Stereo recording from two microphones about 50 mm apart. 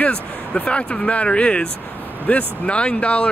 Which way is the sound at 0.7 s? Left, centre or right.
Left.